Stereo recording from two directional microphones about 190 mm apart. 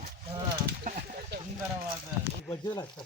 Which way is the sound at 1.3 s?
60° right (ahead or behind).